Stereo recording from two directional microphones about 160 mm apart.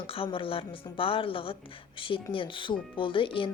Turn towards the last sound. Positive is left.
turn(degrees=30)  # may be behind; listen again after turning